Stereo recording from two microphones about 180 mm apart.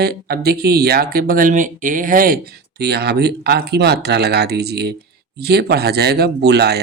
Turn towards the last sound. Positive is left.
turn(degrees=-65)  # may be behind; listen again after turning